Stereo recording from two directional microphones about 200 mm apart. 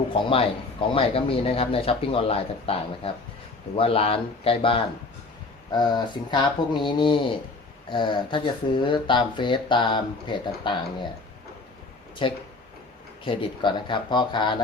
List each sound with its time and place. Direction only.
0.1 s speech: 25° left (ahead or behind)
12.2 s speech: 25° left (ahead or behind)